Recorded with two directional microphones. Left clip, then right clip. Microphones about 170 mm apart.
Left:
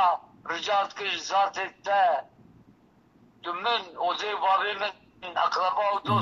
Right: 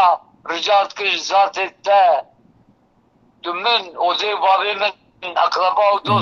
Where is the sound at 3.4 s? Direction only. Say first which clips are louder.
Right 9 dB; 20° right (ahead or behind).